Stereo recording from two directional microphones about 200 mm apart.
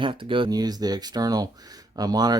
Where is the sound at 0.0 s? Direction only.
25° right (ahead or behind).